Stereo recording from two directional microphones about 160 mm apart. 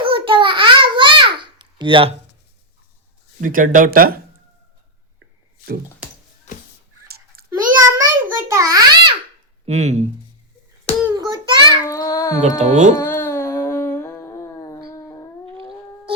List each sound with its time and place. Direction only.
0.0 s babbling: 30° right (ahead or behind)
3.4 s speech: 55° right (ahead or behind)
7.4 s a sound: 70° right (ahead or behind)
7.8 s a sound: 20° right (ahead or behind)
9.6 s speech: 45° right (ahead or behind)
11.1 s child singing: 25° right (ahead or behind)
11.9 s babbling: 20° left (ahead or behind)
12.4 s speech: 50° right (ahead or behind)
13.0 s a sound: 15° left (ahead or behind)